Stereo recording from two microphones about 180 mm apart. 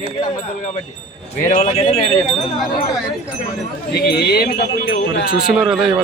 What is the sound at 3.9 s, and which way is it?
Speech, 65° left (ahead or behind).